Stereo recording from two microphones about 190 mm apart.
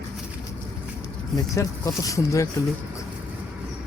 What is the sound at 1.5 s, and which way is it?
Speech, 15° left (ahead or behind).